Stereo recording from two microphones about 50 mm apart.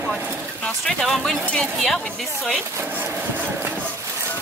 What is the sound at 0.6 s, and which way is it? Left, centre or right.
A woman's voice, centre.